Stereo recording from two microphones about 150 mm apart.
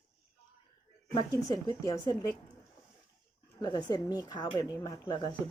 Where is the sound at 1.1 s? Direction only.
25° left (ahead or behind).